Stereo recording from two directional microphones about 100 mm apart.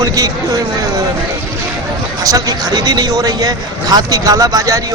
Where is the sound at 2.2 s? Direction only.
40° right (ahead or behind).